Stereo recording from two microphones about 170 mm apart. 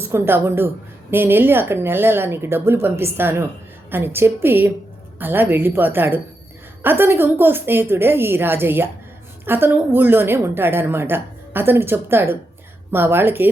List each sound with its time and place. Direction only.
0.0 s a woman's voice: 15° right (ahead or behind)